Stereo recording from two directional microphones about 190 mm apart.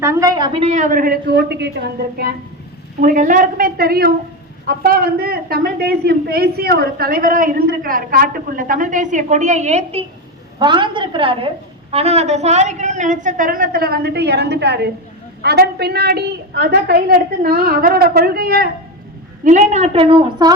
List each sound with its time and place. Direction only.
0.0 s a woman's voice: 15° right (ahead or behind); by 1.7 s 60° right (ahead or behind)
3.0 s a woman's voice: 45° right (ahead or behind)
19.5 s a woman's voice: 35° right (ahead or behind)